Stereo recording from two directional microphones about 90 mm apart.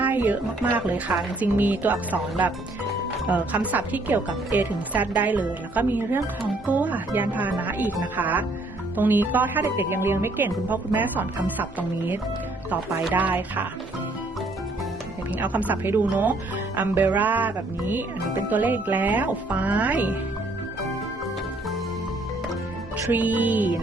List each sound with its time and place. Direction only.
0.0 s speech: 20° right (ahead or behind)
3.2 s speech: 15° right (ahead or behind)
15.3 s speech: 15° right (ahead or behind)
23.1 s speech: 20° right (ahead or behind)